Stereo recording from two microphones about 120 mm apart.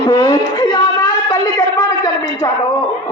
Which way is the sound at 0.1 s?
30° left (ahead or behind).